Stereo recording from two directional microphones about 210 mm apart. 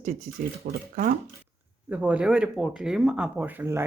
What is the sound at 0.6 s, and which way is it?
Speech, 45° right (ahead or behind).